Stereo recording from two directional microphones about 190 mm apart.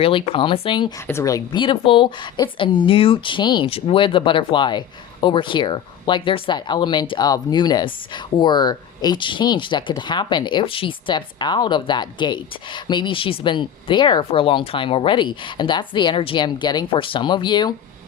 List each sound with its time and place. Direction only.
0.0 s speech: 25° left (ahead or behind)